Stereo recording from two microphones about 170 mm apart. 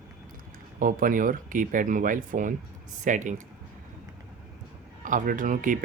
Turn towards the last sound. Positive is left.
turn(degrees=-50)  # may be behind; listen again after turning